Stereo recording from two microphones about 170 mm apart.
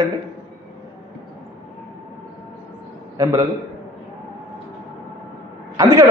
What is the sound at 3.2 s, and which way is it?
Speech, 20° right (ahead or behind).